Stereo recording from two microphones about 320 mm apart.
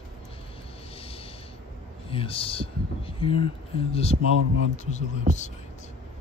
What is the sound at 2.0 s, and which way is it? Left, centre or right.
Speech, centre.